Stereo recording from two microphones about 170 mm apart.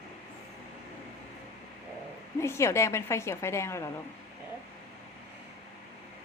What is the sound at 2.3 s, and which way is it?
A woman's voice, 15° left (ahead or behind).